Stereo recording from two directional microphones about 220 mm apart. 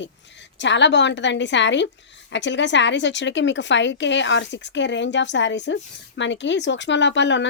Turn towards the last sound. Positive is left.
turn(degrees=55)  # may be behind; listen again after turning